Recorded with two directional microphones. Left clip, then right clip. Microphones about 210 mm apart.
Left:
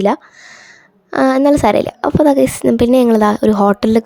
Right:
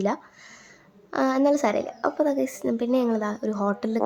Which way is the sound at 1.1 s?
35° left (ahead or behind).